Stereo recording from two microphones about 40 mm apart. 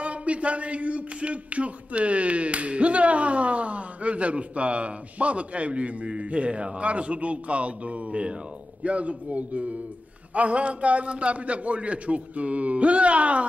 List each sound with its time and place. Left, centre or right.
0.0 s speech: right